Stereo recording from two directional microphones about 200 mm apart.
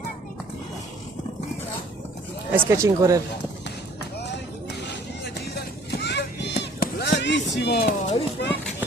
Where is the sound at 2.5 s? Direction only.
15° right (ahead or behind).